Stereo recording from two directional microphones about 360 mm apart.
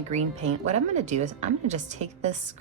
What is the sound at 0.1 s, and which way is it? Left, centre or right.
Speech, centre.